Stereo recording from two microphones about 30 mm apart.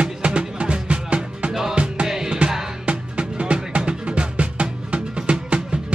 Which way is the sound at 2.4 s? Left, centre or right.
Right.